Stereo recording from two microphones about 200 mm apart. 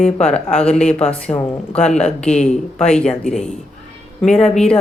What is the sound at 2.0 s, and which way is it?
Speech, 5° left (ahead or behind).